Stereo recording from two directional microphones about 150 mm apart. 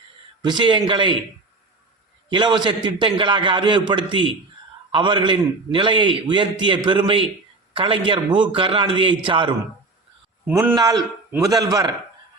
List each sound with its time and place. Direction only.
0.4 s a man's voice: 30° right (ahead or behind)
2.3 s a man's voice: 30° right (ahead or behind)
10.5 s a man's voice: 15° right (ahead or behind)
10.8 s a man's voice: 25° right (ahead or behind)